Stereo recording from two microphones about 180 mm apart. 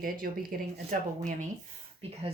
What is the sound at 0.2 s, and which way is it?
Speech, 55° right (ahead or behind).